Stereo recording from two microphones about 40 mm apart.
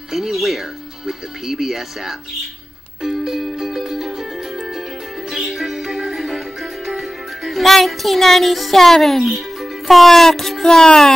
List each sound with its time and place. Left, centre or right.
0.1 s speech: centre
3.0 s music: centre